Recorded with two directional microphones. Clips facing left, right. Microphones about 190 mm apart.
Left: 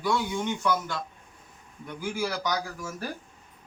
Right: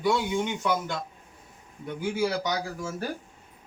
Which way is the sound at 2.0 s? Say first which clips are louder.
Right 3 dB; 25° right (ahead or behind).